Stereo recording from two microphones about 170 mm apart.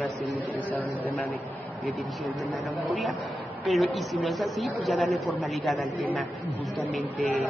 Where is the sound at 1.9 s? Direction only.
5° right (ahead or behind).